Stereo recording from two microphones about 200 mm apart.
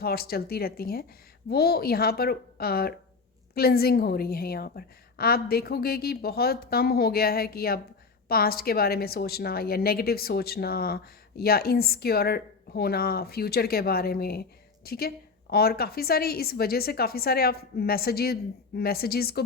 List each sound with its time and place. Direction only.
0.0 s a woman's voice: 50° left (ahead or behind)